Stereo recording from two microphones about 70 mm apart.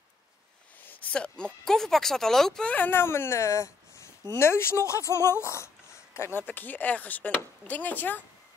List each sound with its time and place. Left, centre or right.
1.1 s speech: centre
2.6 s speech: left
2.9 s speech: left